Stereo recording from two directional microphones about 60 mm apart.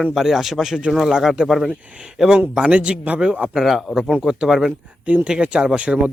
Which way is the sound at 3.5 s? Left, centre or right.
Centre.